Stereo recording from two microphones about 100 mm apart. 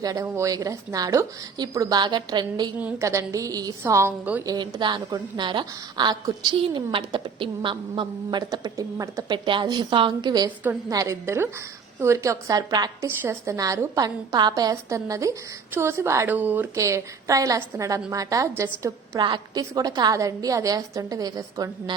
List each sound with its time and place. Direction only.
0.0 s a woman's voice: 35° right (ahead or behind)
2.0 s a woman's voice: 50° right (ahead or behind)
3.0 s a woman's voice: 30° right (ahead or behind)
4.4 s a woman's voice: 50° right (ahead or behind)
9.5 s a woman's voice: 50° right (ahead or behind)
10.8 s a woman's voice: 30° right (ahead or behind)
13.0 s a woman's voice: 30° right (ahead or behind)
16.3 s speech: 20° right (ahead or behind)
16.7 s a woman's voice: 30° right (ahead or behind)
19.2 s a woman's voice: 45° right (ahead or behind)